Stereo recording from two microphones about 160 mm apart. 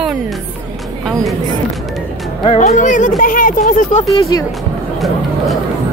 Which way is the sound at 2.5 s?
45° left (ahead or behind).